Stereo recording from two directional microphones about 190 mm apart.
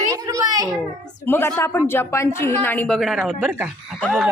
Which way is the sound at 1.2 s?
10° left (ahead or behind).